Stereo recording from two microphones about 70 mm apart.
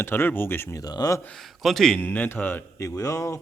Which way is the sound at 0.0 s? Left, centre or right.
Left.